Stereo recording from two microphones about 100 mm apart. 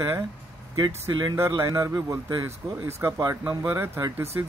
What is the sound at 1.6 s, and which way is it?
Speech, 30° right (ahead or behind).